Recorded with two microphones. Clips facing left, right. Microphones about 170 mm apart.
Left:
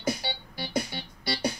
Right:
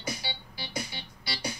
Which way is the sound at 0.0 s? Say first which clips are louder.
Left 6 dB; 55° left (ahead or behind).